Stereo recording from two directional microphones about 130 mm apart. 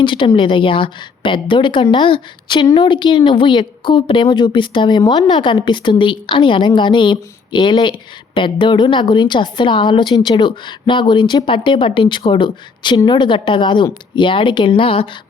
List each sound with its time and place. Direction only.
0.0 s speech: 40° left (ahead or behind)